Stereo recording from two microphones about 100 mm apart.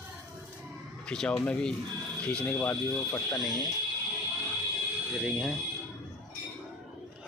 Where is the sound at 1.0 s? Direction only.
5° left (ahead or behind).